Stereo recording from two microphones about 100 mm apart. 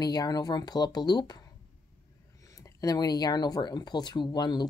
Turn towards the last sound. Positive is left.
turn(degrees=45)  # may be behind; listen again after turning